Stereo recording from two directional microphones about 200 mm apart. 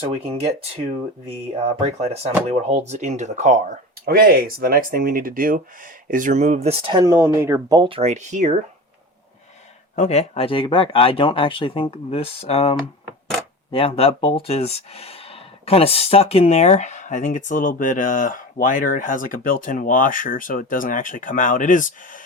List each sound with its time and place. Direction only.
0.0 s speech: 30° right (ahead or behind)
1.5 s speech: 30° right (ahead or behind)
9.9 s speech: 35° left (ahead or behind)